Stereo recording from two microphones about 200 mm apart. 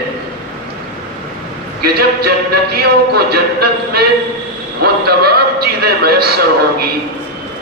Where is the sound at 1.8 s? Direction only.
50° right (ahead or behind).